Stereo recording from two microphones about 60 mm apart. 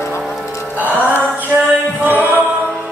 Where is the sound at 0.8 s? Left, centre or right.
Right.